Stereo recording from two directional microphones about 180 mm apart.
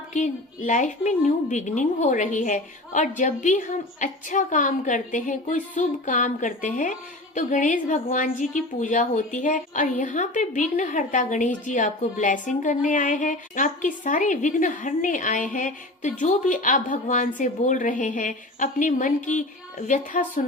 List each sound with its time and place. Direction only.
0.1 s a woman's voice: 45° left (ahead or behind)